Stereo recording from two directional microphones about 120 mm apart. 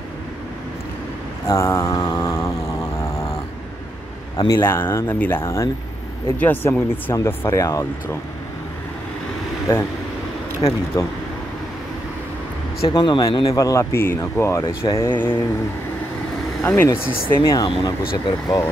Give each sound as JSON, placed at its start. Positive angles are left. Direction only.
{"t": 1.5, "sound": "mantra", "side_deg": 25}
{"t": 4.5, "sound": "speech", "side_deg": 20}
{"t": 9.7, "sound": "speech", "side_deg": 20}
{"t": 10.9, "sound": "speech", "side_deg": 30}
{"t": 12.9, "sound": "speech", "side_deg": 35}
{"t": 16.6, "sound": "speech", "side_deg": 15}
{"t": 17.3, "sound": "speech", "side_deg": 30}